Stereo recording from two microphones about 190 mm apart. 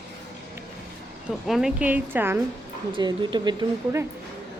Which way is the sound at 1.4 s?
Centre (ahead or behind).